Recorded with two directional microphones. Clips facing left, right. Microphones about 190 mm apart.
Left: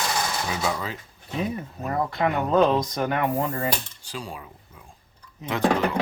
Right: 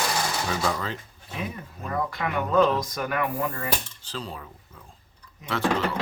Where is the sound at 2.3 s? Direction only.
25° left (ahead or behind).